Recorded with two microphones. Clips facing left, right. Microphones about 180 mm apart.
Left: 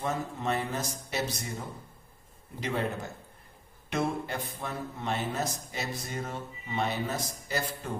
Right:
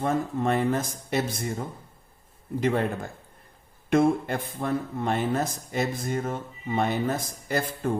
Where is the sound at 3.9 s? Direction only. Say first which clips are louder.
Right 9 dB; 50° right (ahead or behind).